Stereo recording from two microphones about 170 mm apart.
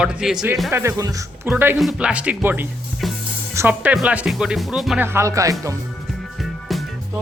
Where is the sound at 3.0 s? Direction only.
Centre (ahead or behind).